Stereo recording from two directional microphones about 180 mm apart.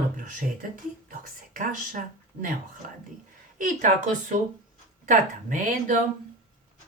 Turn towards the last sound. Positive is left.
turn(degrees=-45)  # may be behind; listen again after turning